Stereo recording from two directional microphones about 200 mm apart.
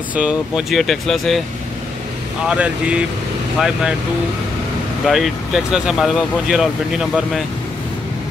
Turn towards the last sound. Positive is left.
turn(degrees=-5)  # may be behind; listen again after turning